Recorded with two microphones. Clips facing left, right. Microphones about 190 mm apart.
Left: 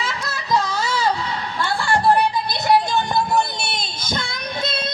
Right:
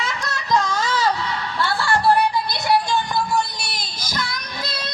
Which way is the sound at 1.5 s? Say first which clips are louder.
Even; 20° left (ahead or behind).